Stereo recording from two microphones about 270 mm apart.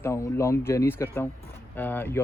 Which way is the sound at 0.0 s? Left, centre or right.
Centre.